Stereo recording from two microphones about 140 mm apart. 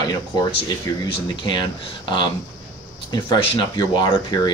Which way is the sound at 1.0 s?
35° left (ahead or behind).